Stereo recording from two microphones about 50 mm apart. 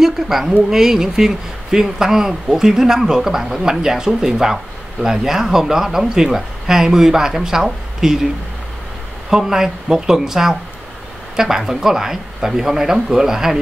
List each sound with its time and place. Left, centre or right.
0.0 s speech: centre
9.3 s speech: centre